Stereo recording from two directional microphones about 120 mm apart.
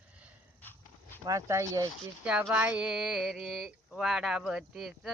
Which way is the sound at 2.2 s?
10° right (ahead or behind).